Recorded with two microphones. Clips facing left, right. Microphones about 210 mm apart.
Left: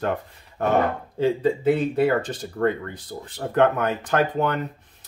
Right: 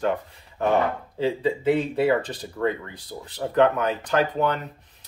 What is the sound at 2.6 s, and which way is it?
Speech, 50° left (ahead or behind).